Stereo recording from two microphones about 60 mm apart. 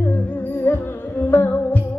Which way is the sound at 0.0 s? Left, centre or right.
Left.